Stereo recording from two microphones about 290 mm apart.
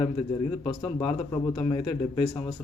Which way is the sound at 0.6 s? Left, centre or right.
Centre.